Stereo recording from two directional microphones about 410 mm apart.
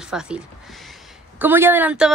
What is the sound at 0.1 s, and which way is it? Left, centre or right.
Speech, centre.